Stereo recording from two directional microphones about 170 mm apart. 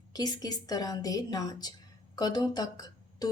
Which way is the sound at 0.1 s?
20° left (ahead or behind).